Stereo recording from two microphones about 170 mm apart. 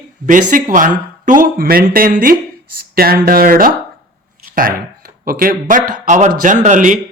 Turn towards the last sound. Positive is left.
turn(degrees=-50)  # may be behind; listen again after turning